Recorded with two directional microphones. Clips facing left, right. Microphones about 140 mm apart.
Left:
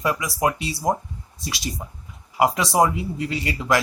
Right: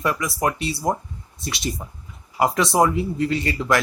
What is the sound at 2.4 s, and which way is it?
Speech, 15° left (ahead or behind).